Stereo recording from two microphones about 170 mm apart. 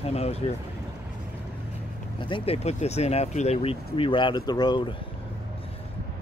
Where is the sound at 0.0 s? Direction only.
35° left (ahead or behind).